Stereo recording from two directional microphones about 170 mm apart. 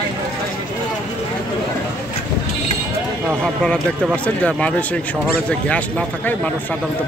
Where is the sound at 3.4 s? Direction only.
5° left (ahead or behind).